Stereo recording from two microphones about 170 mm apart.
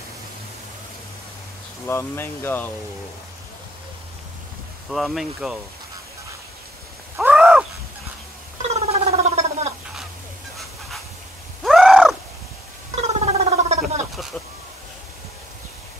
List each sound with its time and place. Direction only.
1.9 s speech: 15° left (ahead or behind)
4.9 s speech: centre (ahead or behind)
7.2 s wild animals: 5° right (ahead or behind)
8.6 s gargling: 40° right (ahead or behind)
11.6 s crow: centre (ahead or behind)
12.9 s gargling: 40° right (ahead or behind)